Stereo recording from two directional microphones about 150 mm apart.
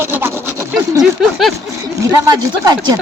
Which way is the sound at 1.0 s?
Centre (ahead or behind).